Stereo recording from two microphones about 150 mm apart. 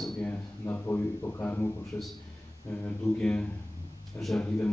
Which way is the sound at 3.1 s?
5° left (ahead or behind).